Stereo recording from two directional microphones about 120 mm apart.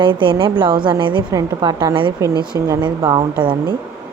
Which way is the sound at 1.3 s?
30° right (ahead or behind).